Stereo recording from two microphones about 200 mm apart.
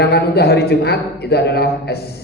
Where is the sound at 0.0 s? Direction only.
55° left (ahead or behind).